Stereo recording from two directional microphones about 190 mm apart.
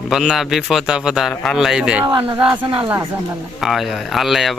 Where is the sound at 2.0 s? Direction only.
25° right (ahead or behind).